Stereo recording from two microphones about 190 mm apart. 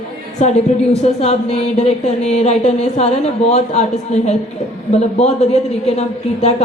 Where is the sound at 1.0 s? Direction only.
35° left (ahead or behind).